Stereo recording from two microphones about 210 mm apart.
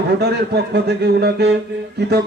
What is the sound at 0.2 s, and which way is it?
Speech, 50° right (ahead or behind).